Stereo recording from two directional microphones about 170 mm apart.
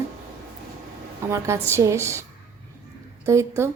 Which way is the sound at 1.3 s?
15° right (ahead or behind).